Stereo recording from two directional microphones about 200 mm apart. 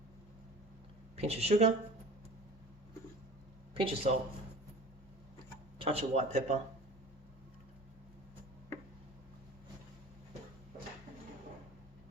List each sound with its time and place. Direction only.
1.1 s speech: 30° right (ahead or behind)
3.8 s speech: 30° right (ahead or behind)
5.8 s speech: 30° right (ahead or behind)